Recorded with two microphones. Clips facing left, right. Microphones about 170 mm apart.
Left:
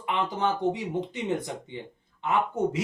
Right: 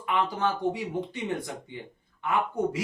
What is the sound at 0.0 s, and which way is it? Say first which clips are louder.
Speech: even; 20° left (ahead or behind).